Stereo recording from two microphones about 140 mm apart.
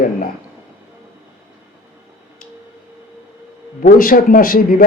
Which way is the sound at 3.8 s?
75° left (ahead or behind).